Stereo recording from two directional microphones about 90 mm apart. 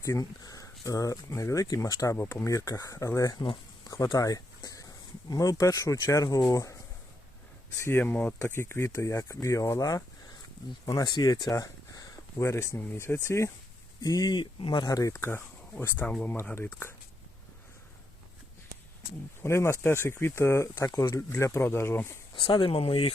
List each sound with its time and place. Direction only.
0.0 s speech: 40° left (ahead or behind)
2.1 s speech: 25° left (ahead or behind)
7.8 s speech: 25° left (ahead or behind)
14.0 s speech: 45° left (ahead or behind)
14.6 s speech: 60° left (ahead or behind)
14.8 s speech: 40° left (ahead or behind)
15.1 s speech: 25° left (ahead or behind)
19.4 s speech: 30° left (ahead or behind)
20.8 s speech: 45° left (ahead or behind); by 22.0 s 25° left (ahead or behind)
22.4 s speech: 75° left (ahead or behind); by 23.1 s 90° left